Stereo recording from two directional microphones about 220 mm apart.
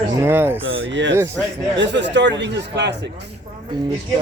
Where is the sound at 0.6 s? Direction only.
55° right (ahead or behind).